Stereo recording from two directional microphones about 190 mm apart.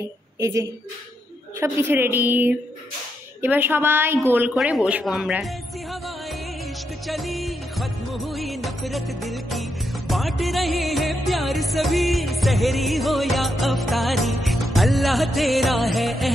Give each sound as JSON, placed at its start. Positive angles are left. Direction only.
{"t": 0.4, "sound": "a woman's voice", "side_deg": -15}
{"t": 4.6, "sound": "music", "side_deg": -5}
{"t": 7.1, "sound": "music", "side_deg": 0}